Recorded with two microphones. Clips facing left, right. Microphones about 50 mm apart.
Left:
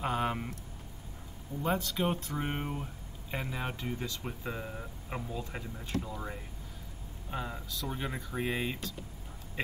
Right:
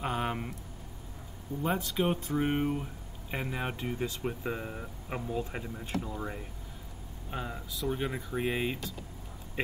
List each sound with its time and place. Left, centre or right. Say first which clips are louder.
0.0 s speech: left 1 dB; centre
1.6 s speech: right 1 dB; centre